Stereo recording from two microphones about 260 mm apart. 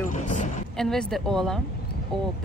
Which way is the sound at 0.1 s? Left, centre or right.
Left.